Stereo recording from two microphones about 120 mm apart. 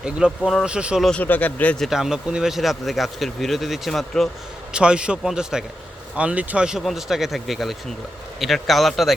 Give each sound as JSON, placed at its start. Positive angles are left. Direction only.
{"t": 0.0, "sound": "speech", "side_deg": -5}
{"t": 1.0, "sound": "speech", "side_deg": 10}
{"t": 1.9, "sound": "speech", "side_deg": -5}